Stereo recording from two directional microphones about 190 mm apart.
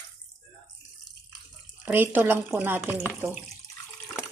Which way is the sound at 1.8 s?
10° right (ahead or behind).